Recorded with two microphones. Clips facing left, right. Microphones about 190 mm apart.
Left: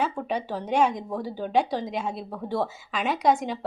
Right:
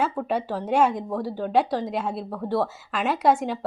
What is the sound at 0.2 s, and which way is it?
Speech, 5° right (ahead or behind).